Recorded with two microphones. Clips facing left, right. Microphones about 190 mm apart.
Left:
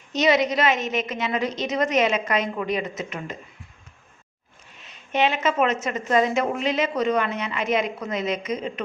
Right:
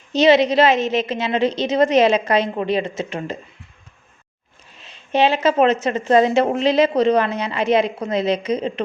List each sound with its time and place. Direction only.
0.1 s a woman's voice: 30° right (ahead or behind)
4.8 s a woman's voice: 30° right (ahead or behind)